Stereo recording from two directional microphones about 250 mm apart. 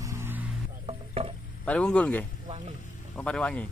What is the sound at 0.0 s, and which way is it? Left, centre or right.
Music, centre.